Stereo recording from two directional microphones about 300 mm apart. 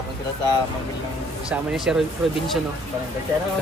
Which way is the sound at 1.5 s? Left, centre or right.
Centre.